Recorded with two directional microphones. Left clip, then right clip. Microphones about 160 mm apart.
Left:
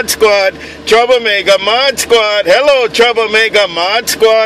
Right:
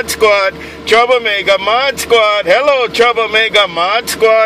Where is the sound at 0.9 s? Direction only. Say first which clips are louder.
Left 1 dB; 35° left (ahead or behind).